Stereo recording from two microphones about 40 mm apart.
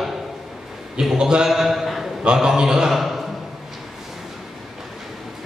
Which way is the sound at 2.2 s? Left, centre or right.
Centre.